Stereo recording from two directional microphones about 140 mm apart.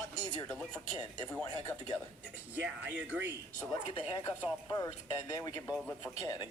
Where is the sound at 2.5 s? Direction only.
10° right (ahead or behind).